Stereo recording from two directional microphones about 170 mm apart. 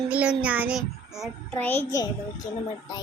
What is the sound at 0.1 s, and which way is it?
Child singing, 5° right (ahead or behind).